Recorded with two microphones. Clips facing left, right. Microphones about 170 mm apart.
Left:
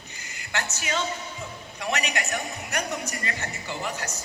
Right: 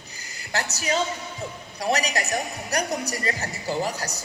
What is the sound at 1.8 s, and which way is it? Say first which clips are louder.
A woman's voice: right 4 dB; 35° right (ahead or behind).